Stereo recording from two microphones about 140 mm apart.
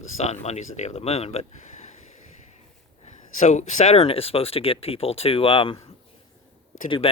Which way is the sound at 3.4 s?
55° left (ahead or behind).